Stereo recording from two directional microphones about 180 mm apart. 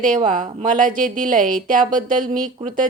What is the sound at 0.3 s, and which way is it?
Speech, 45° right (ahead or behind).